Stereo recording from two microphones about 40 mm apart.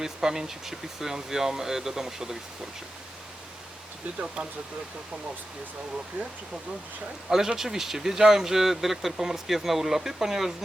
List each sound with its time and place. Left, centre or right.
0.0 s speech: centre
4.4 s speech: right
7.3 s speech: centre